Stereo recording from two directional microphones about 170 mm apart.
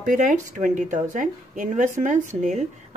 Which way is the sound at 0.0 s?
50° right (ahead or behind).